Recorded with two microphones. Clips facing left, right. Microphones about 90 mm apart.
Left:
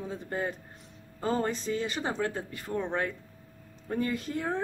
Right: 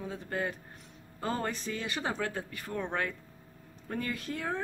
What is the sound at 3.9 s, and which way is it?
Speech, 25° left (ahead or behind).